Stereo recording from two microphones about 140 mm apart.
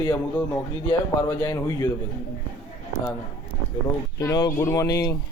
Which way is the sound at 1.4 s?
25° left (ahead or behind).